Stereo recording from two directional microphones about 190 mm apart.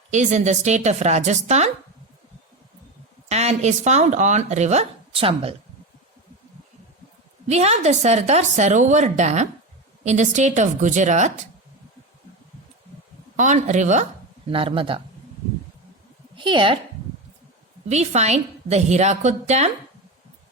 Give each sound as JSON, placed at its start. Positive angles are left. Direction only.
{"t": 0.1, "sound": "speech", "side_deg": -40}
{"t": 3.2, "sound": "speech", "side_deg": -35}
{"t": 7.4, "sound": "speech", "side_deg": -35}
{"t": 13.3, "sound": "speech", "side_deg": -40}
{"t": 16.3, "sound": "a woman's voice", "side_deg": -25}
{"t": 17.8, "sound": "speech", "side_deg": -35}